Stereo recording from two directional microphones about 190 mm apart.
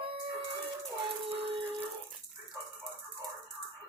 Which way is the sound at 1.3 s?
25° right (ahead or behind).